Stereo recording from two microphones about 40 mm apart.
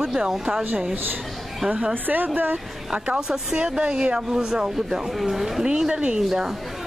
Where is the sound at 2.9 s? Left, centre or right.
Centre.